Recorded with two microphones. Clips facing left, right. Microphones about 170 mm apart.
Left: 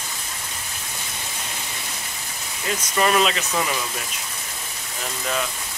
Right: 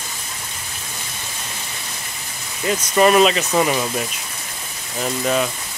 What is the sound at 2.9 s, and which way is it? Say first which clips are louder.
Speech: right 6 dB; 25° right (ahead or behind).